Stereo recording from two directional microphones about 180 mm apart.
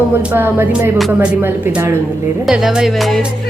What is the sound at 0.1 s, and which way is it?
Music, 10° right (ahead or behind).